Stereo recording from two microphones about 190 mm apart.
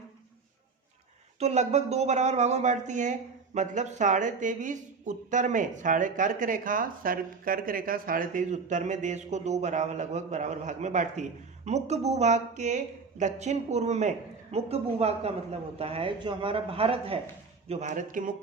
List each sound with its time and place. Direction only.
1.4 s speech: 35° right (ahead or behind)